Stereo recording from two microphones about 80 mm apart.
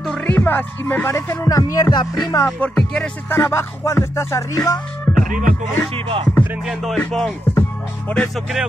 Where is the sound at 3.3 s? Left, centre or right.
Left.